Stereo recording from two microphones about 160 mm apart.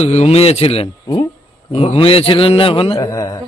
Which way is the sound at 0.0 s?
40° left (ahead or behind).